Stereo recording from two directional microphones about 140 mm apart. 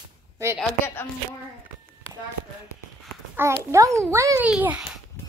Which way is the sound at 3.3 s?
20° right (ahead or behind).